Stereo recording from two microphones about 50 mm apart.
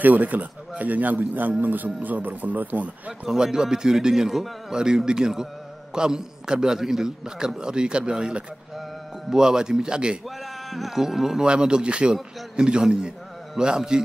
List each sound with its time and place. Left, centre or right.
0.0 s a man's voice: right
3.3 s a man's voice: centre
10.7 s a man's voice: centre